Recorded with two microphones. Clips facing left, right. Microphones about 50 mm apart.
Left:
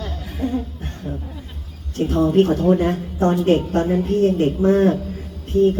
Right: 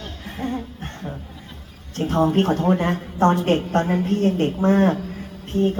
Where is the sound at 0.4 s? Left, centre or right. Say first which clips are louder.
Left 4 dB; right.